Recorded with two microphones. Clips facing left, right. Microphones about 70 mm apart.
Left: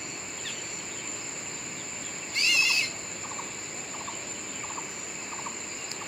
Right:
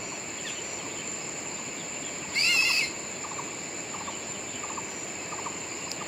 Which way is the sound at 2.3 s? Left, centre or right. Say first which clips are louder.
Even; right.